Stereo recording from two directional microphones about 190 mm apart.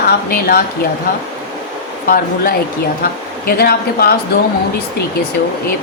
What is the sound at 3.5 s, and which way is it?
Speech, 55° left (ahead or behind).